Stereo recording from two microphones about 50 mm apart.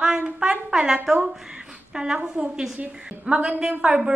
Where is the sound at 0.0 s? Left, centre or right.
Centre.